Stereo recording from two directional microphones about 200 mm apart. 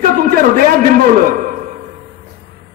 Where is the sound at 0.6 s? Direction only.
45° right (ahead or behind).